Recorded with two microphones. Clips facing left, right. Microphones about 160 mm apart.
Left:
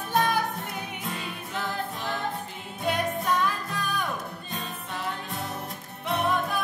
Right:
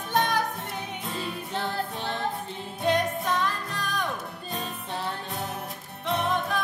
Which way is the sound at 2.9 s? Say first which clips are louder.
Right 1 dB; 10° left (ahead or behind).